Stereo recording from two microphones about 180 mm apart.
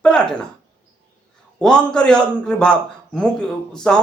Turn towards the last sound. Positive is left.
turn(degrees=5)  # may be behind; listen again after turning